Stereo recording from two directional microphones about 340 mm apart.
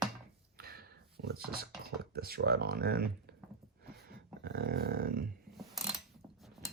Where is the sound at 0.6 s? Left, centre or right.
Right.